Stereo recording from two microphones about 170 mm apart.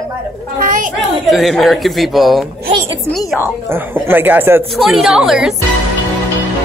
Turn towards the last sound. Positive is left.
turn(degrees=-5)  # may be behind; listen again after turning